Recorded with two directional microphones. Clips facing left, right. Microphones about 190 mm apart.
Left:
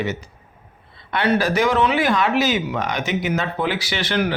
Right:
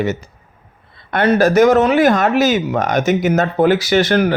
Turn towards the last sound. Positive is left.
turn(degrees=-45)  # may be behind; listen again after turning